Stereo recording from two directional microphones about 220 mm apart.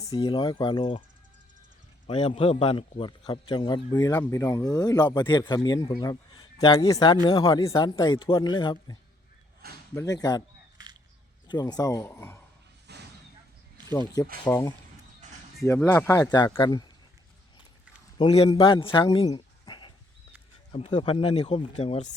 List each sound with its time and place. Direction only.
0.0 s a man's voice: 20° left (ahead or behind)
2.0 s a man's voice: 25° left (ahead or behind)
11.4 s speech: 20° left (ahead or behind)
12.9 s a sound: 50° right (ahead or behind)
14.4 s speech: 15° left (ahead or behind)
18.2 s a man's voice: 25° left (ahead or behind)
18.9 s a sound: 20° left (ahead or behind)
20.7 s a man's voice: 25° left (ahead or behind)